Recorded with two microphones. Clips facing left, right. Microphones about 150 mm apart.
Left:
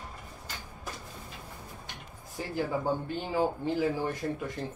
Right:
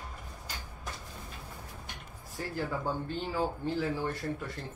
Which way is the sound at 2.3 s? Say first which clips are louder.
Left 3 dB; 15° left (ahead or behind).